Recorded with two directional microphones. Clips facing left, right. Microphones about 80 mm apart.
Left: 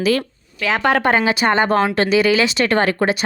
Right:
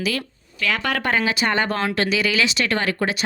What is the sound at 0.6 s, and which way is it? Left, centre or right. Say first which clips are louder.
A woman's voice: left 6 dB; left.